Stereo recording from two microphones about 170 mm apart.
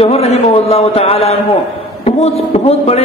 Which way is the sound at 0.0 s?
35° left (ahead or behind).